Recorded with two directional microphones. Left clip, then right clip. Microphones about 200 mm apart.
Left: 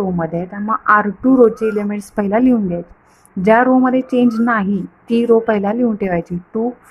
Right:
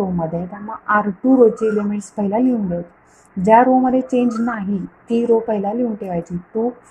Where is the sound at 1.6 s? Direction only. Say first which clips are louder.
Left 1 dB; 5° left (ahead or behind).